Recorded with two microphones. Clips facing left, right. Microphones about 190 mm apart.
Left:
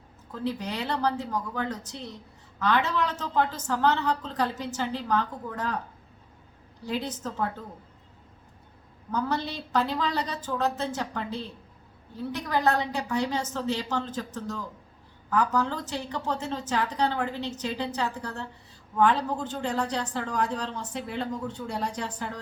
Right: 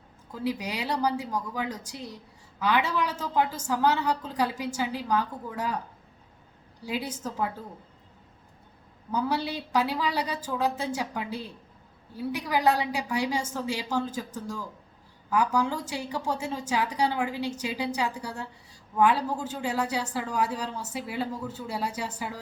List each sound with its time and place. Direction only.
0.3 s a woman's voice: 10° right (ahead or behind)
6.8 s a woman's voice: 10° right (ahead or behind)
9.1 s a woman's voice: 10° right (ahead or behind)